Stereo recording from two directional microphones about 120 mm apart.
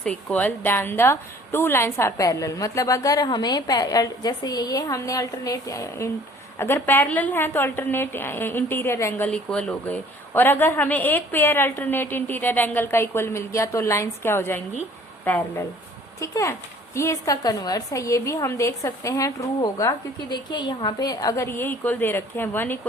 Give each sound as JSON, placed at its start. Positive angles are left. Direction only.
{"t": 0.0, "sound": "a woman's voice", "side_deg": 10}